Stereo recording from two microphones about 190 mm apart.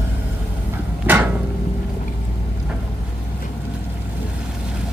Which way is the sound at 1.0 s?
5° right (ahead or behind).